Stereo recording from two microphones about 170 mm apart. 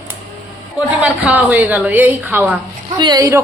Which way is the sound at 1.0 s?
10° right (ahead or behind).